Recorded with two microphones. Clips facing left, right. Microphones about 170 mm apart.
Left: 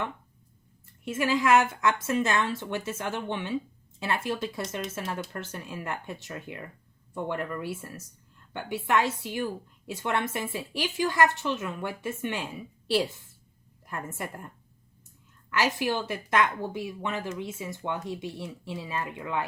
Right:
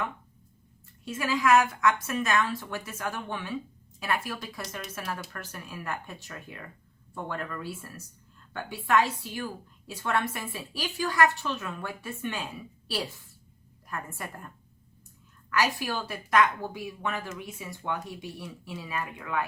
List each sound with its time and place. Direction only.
1.0 s a woman's voice: 20° left (ahead or behind)